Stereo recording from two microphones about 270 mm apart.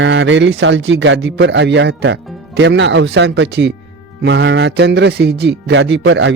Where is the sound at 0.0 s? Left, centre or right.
Right.